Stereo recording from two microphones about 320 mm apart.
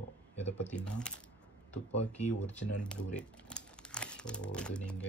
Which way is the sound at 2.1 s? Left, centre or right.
Left.